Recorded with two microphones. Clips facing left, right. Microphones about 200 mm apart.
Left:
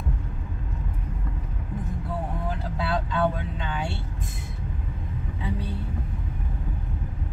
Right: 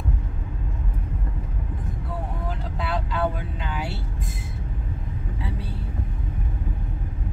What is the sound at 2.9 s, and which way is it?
Vehicle, 5° right (ahead or behind).